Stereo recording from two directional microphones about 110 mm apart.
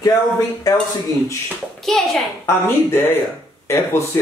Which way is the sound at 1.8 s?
5° left (ahead or behind).